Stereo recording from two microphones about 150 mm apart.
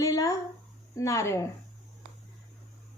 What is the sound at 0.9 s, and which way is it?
Speech, 20° left (ahead or behind).